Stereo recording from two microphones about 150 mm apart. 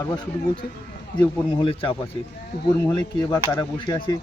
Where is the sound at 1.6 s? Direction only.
35° left (ahead or behind).